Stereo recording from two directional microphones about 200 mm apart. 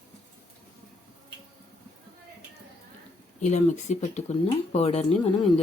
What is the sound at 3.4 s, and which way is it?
Speech, 35° left (ahead or behind).